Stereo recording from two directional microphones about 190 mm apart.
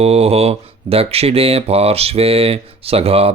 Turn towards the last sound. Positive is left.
turn(degrees=-30)  # may be behind; listen again after turning